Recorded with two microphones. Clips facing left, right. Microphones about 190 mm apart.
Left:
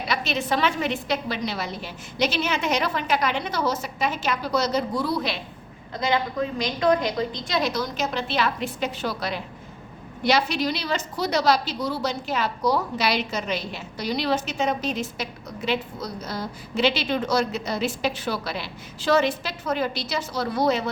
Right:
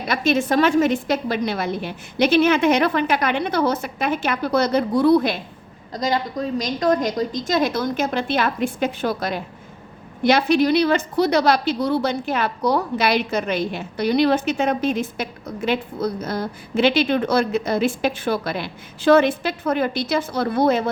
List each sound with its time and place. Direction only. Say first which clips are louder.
0.1 s a woman's voice: right 7 dB; 50° right (ahead or behind)
5.9 s a woman's voice: right 2 dB; 40° right (ahead or behind)